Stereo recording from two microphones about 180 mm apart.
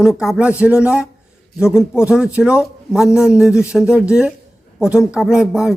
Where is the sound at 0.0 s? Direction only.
5° right (ahead or behind).